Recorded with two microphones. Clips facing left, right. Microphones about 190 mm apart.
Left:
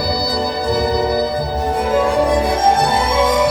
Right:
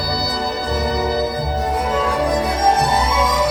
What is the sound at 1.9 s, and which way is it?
Music, 30° left (ahead or behind).